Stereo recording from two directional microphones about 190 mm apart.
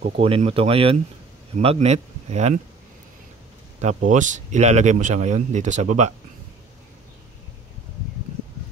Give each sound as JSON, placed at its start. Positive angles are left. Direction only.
{"t": 0.2, "sound": "speech", "side_deg": -30}
{"t": 3.8, "sound": "speech", "side_deg": -40}